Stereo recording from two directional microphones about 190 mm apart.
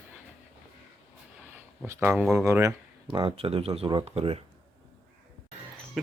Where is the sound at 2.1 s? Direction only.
Centre (ahead or behind).